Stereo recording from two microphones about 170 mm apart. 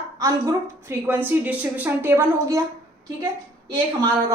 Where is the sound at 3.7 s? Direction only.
25° right (ahead or behind).